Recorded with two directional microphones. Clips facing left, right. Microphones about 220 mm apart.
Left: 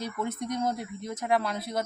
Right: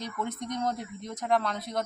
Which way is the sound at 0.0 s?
5° left (ahead or behind).